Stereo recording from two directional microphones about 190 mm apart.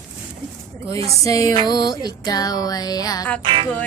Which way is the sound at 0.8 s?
15° left (ahead or behind).